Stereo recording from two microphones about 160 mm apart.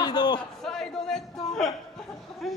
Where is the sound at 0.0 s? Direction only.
25° left (ahead or behind).